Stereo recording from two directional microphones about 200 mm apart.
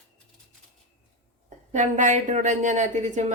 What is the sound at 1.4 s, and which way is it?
A woman's voice, 40° right (ahead or behind).